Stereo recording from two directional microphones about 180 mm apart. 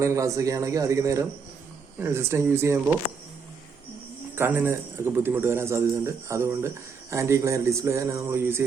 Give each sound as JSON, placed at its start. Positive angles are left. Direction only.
{"t": 0.0, "sound": "a man's voice", "side_deg": -15}
{"t": 4.4, "sound": "a man's voice", "side_deg": -10}